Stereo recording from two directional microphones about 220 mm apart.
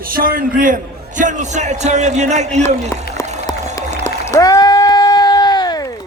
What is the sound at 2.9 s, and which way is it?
Speech, 15° left (ahead or behind).